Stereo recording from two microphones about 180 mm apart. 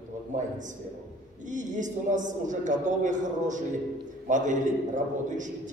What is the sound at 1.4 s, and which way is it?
A man's voice, 45° right (ahead or behind).